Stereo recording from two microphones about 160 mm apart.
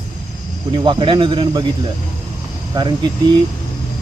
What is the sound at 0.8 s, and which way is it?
Speech, 30° right (ahead or behind).